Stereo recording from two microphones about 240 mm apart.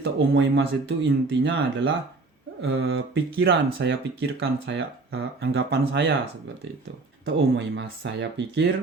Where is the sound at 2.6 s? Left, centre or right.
Right.